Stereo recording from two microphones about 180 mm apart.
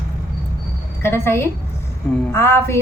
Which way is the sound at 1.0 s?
15° left (ahead or behind).